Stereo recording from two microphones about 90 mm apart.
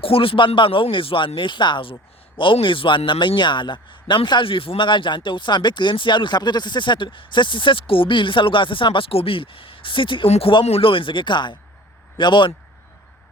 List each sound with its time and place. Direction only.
0.0 s a man's voice: 90° left; by 12.5 s 60° left (ahead or behind)